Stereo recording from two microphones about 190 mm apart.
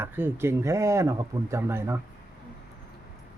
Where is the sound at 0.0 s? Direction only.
10° right (ahead or behind).